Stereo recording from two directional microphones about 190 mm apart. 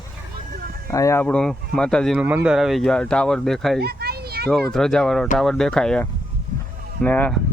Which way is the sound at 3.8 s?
55° right (ahead or behind).